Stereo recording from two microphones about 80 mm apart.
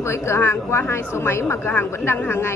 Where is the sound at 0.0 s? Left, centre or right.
Left.